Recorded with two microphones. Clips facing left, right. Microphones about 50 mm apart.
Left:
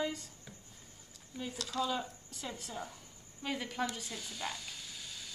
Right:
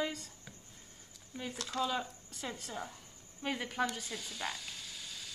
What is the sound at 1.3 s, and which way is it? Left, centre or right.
Speech, right.